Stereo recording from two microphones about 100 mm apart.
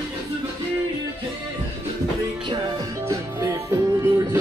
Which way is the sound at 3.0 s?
30° right (ahead or behind).